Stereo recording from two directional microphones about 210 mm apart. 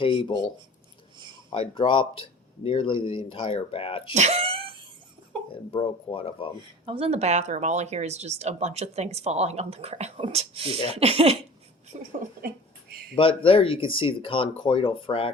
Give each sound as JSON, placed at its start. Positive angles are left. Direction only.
{"t": 0.0, "sound": "speech", "side_deg": 25}
{"t": 1.5, "sound": "speech", "side_deg": 25}
{"t": 4.1, "sound": "throat clearing", "side_deg": -30}
{"t": 5.7, "sound": "speech", "side_deg": 25}
{"t": 6.8, "sound": "speech", "side_deg": -25}
{"t": 10.9, "sound": "a sound", "side_deg": -30}
{"t": 13.1, "sound": "speech", "side_deg": 25}